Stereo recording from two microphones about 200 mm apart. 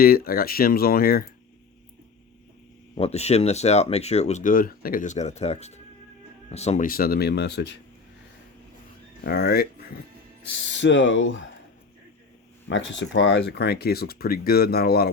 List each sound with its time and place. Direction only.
0.0 s speech: 45° left (ahead or behind)
3.0 s speech: 30° left (ahead or behind); by 7.7 s 55° left (ahead or behind)
9.2 s speech: 55° left (ahead or behind)
10.7 s speech: 65° left (ahead or behind)
12.6 s speech: 65° left (ahead or behind); by 15.1 s 50° left (ahead or behind)